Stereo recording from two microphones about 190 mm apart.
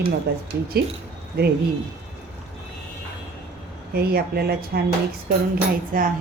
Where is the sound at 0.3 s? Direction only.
60° right (ahead or behind).